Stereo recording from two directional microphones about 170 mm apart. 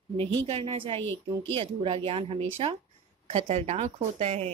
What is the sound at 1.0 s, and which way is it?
Speech, 15° left (ahead or behind).